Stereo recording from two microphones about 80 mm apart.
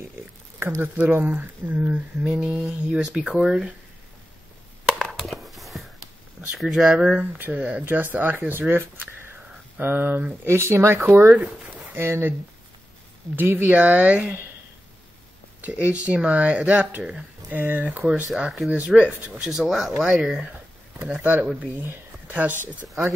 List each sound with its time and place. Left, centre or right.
0.6 s speech: right
0.9 s speech: centre
5.1 s a sound: centre
6.6 s speech: centre
7.2 s speech: right
7.5 s speech: centre
11.3 s speech: centre
11.9 s speech: right
13.4 s speech: right
15.6 s speech: centre
19.6 s speech: centre
21.0 s speech: centre